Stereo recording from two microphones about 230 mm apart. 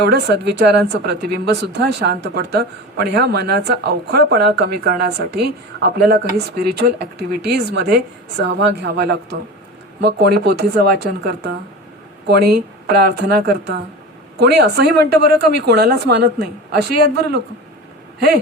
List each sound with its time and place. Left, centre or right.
0.0 s a woman's voice: right